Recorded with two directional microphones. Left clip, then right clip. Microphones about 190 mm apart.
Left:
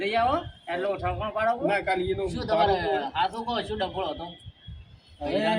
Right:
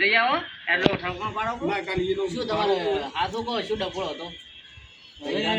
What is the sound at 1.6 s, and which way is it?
Speech, 30° left (ahead or behind).